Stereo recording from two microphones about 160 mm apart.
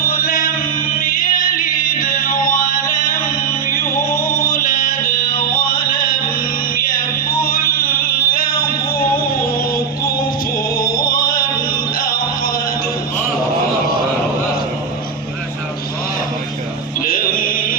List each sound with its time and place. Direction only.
0.1 s chant: 65° left (ahead or behind)
1.2 s music: 60° left (ahead or behind)
4.5 s chant: 60° left (ahead or behind)
5.9 s music: 65° left (ahead or behind)
11.1 s music: 60° left (ahead or behind)
17.1 s music: 65° left (ahead or behind)